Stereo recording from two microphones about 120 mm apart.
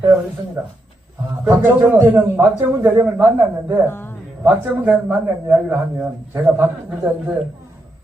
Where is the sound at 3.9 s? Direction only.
20° left (ahead or behind).